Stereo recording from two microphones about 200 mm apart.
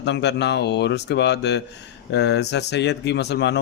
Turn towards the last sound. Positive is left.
turn(degrees=60)  # may be behind; listen again after turning